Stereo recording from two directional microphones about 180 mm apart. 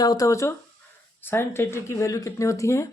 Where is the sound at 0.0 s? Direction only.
20° left (ahead or behind).